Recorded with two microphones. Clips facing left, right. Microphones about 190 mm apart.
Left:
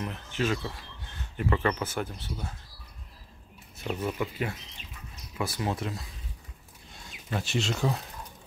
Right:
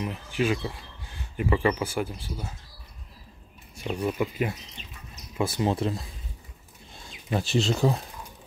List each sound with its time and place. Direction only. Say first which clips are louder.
0.0 s speech: right 3 dB; 10° right (ahead or behind)
4.0 s speech: right 5 dB; 15° right (ahead or behind)
7.3 s speech: right 5 dB; 35° right (ahead or behind)